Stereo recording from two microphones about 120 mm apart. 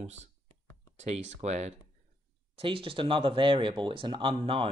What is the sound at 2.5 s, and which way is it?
Speech, 50° right (ahead or behind).